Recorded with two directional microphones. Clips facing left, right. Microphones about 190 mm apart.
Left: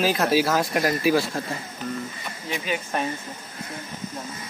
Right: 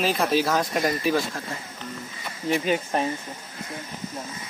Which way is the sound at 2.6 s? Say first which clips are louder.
Right 4 dB; 40° right (ahead or behind).